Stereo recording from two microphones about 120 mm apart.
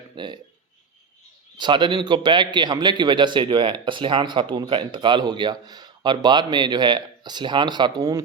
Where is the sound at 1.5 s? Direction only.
40° right (ahead or behind).